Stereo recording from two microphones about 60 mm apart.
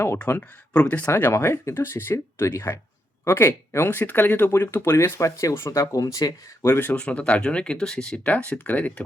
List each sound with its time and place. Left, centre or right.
0.3 s speech: left
0.7 s speech: left
1.1 s speech: left
4.9 s speech: left
6.7 s speech: left
6.9 s speech: centre
8.1 s speech: left